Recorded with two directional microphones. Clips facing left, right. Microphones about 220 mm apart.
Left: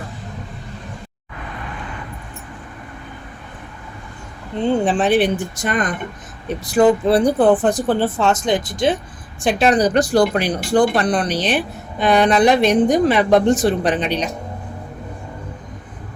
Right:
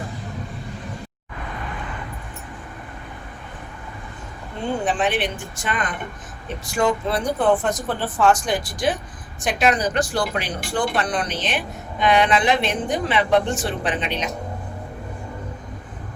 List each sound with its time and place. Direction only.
4.9 s speech: 30° left (ahead or behind)